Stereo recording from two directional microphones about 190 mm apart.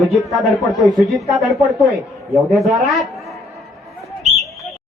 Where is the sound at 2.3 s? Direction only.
Centre (ahead or behind).